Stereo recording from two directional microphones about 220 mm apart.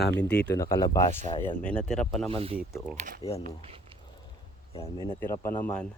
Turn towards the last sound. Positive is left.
turn(degrees=5)  # may be behind; listen again after turning